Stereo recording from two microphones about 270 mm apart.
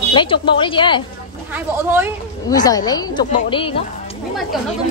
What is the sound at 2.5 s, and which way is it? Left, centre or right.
A woman's voice, centre.